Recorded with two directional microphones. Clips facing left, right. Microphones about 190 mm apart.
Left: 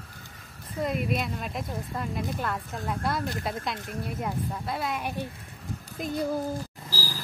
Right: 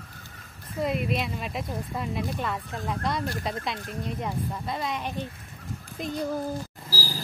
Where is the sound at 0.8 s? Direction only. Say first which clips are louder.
Right 1 dB; centre (ahead or behind).